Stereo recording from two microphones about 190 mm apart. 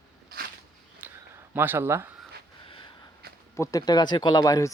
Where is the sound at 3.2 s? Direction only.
55° right (ahead or behind).